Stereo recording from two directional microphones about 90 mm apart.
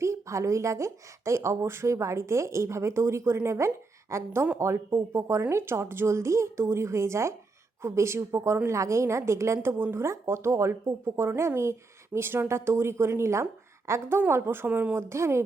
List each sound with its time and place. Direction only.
0.0 s a woman's voice: 35° right (ahead or behind)
14.9 s speech: 30° right (ahead or behind)